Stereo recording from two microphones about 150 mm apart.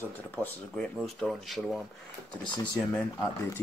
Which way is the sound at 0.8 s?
Centre (ahead or behind).